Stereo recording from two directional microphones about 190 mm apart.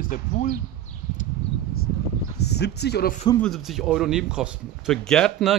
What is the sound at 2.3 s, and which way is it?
Speech, 60° left (ahead or behind).